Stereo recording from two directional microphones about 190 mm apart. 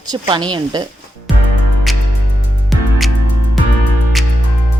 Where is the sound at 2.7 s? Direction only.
Centre (ahead or behind).